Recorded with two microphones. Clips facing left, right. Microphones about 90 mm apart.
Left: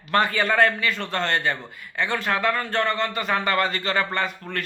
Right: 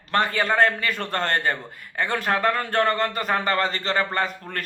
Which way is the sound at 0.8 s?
50° right (ahead or behind).